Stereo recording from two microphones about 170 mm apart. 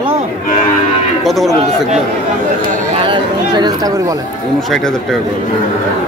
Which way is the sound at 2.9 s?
30° right (ahead or behind).